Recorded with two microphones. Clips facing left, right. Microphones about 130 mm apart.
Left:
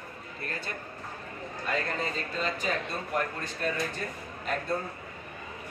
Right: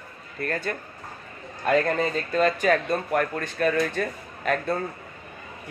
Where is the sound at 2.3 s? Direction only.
55° right (ahead or behind); by 4.5 s 80° right.